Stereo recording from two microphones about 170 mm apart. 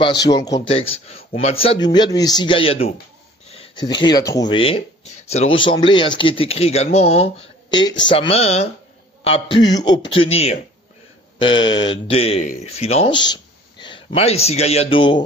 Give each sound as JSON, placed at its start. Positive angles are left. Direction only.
{"t": 0.0, "sound": "speech", "side_deg": 25}
{"t": 0.7, "sound": "speech", "side_deg": 35}
{"t": 7.7, "sound": "speech", "side_deg": 25}